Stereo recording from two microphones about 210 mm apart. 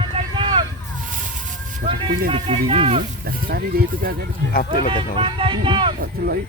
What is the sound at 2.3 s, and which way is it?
Speech, 25° right (ahead or behind).